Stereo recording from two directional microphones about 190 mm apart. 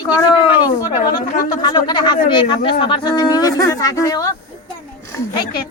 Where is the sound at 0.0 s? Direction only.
25° left (ahead or behind).